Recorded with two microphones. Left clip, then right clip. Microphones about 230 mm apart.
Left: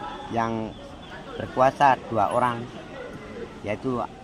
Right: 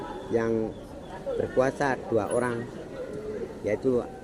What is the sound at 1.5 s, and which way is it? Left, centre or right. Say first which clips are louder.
Speech: left 8 dB; left.